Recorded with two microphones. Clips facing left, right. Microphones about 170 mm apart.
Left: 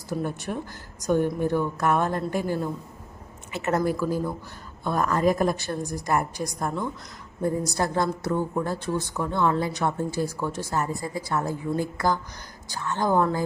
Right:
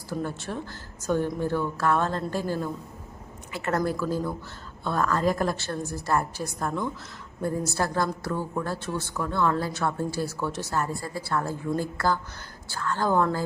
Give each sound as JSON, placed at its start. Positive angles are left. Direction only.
{"t": 0.1, "sound": "a woman's voice", "side_deg": 15}